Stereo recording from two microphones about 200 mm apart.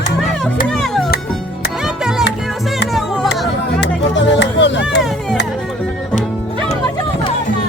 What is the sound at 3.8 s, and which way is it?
Music, 60° left (ahead or behind).